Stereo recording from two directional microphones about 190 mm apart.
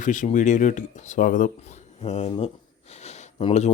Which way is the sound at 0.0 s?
40° left (ahead or behind).